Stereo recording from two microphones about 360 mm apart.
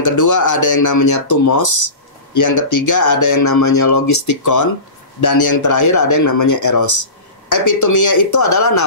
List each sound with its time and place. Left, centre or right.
0.0 s speech: left